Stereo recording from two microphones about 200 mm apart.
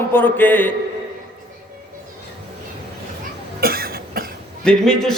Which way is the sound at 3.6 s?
50° right (ahead or behind).